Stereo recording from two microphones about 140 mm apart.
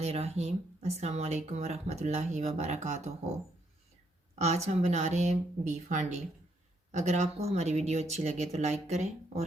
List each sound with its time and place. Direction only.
0.0 s speech: 50° right (ahead or behind)
4.4 s speech: 50° right (ahead or behind)